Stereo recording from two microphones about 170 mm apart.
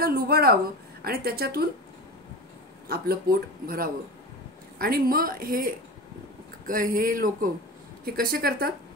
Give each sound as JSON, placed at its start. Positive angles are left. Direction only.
{"t": 0.0, "sound": "speech", "side_deg": -65}
{"t": 2.9, "sound": "speech", "side_deg": -65}